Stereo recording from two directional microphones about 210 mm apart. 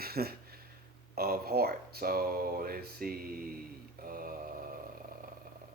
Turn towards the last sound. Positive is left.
turn(degrees=-45)  # may be behind; listen again after turning